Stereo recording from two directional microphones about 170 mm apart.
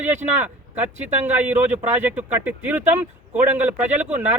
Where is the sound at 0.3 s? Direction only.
10° right (ahead or behind).